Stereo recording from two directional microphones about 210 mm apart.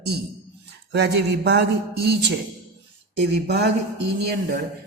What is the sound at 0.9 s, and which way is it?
A man's voice, 55° right (ahead or behind).